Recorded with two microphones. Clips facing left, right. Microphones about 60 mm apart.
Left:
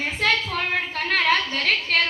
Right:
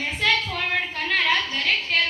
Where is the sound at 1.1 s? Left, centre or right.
Left.